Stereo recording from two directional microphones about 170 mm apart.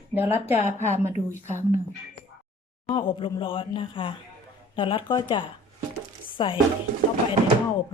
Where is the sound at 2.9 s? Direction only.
30° left (ahead or behind).